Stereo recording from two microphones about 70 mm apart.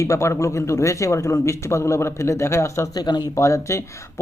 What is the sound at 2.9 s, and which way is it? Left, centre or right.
Speech, left.